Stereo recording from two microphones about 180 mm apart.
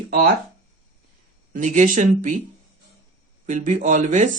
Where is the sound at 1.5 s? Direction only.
45° right (ahead or behind).